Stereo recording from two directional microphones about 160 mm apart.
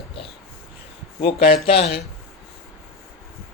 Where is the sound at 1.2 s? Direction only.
35° left (ahead or behind).